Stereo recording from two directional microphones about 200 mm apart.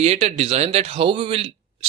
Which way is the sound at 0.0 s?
30° right (ahead or behind).